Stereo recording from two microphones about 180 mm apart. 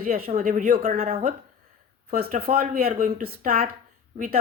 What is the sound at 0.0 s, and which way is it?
A woman's voice, 55° right (ahead or behind).